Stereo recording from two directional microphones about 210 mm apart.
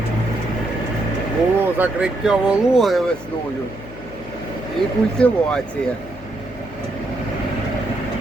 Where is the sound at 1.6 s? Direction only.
5° right (ahead or behind).